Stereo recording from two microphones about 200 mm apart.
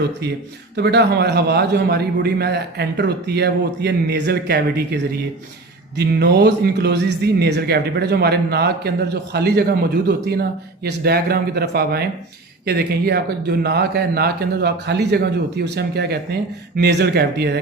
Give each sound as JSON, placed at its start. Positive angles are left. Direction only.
{"t": 0.8, "sound": "a man's voice", "side_deg": -55}
{"t": 6.0, "sound": "a man's voice", "side_deg": -55}